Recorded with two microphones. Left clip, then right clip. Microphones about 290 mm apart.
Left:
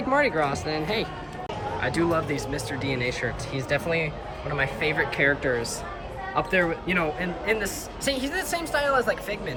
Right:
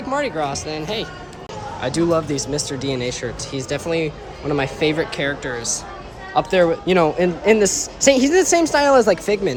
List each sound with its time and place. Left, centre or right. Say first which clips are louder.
0.1 s a woman's voice: right 1 dB; centre